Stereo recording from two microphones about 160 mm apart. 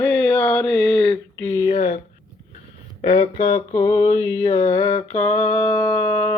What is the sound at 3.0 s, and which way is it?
Speech, 35° left (ahead or behind).